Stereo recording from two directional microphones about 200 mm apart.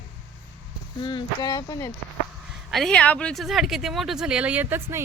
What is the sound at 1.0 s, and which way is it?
Speech, 20° left (ahead or behind).